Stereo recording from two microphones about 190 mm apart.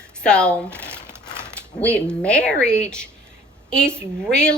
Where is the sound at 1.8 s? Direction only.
5° left (ahead or behind).